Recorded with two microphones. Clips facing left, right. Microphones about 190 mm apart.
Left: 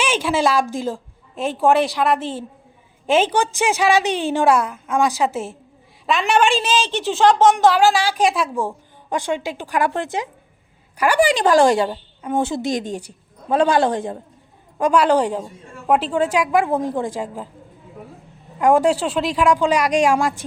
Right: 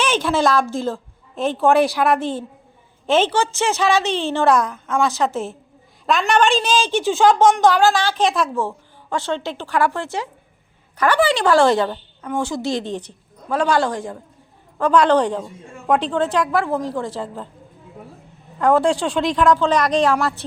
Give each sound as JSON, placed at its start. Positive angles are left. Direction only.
{"t": 0.0, "sound": "a woman's voice", "side_deg": 10}
{"t": 13.5, "sound": "a woman's voice", "side_deg": 20}
{"t": 14.8, "sound": "a woman's voice", "side_deg": 10}
{"t": 18.6, "sound": "a woman's voice", "side_deg": 10}